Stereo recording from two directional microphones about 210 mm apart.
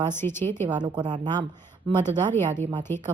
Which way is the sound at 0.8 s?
20° right (ahead or behind).